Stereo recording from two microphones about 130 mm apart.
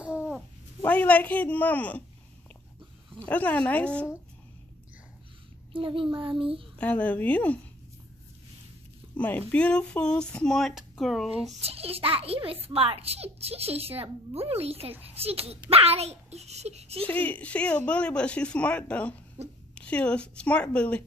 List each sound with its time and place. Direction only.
0.0 s babbling: 10° right (ahead or behind)
0.8 s speech: 10° left (ahead or behind)
3.3 s speech: 10° left (ahead or behind)
5.7 s a woman's voice: 40° right (ahead or behind)
6.8 s speech: 10° left (ahead or behind)
9.1 s speech: 10° left (ahead or behind)
11.6 s a woman's voice: 50° right (ahead or behind)
17.1 s speech: 10° left (ahead or behind)
19.4 s speech: 55° right (ahead or behind)
19.7 s speech: 10° left (ahead or behind)